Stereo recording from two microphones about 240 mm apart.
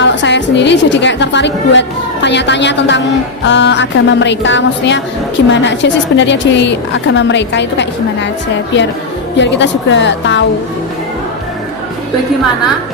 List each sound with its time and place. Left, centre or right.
0.0 s a woman's voice: left
9.4 s a woman's voice: left